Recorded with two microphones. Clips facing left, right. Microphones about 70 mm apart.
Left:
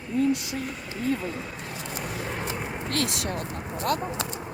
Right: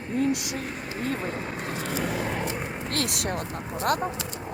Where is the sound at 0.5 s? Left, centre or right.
Right.